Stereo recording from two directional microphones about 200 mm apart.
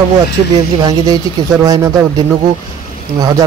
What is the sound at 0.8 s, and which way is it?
Speech, 20° right (ahead or behind).